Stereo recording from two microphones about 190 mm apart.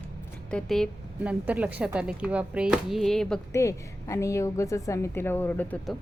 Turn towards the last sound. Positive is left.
turn(degrees=10)  # may be behind; listen again after turning